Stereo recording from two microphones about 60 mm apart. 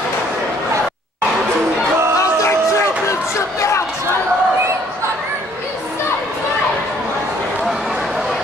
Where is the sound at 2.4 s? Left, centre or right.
Left.